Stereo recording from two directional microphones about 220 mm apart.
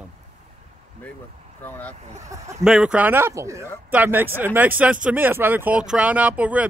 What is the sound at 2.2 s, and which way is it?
Speech, 15° right (ahead or behind).